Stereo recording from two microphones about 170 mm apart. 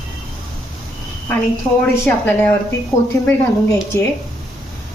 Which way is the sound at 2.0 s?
10° left (ahead or behind).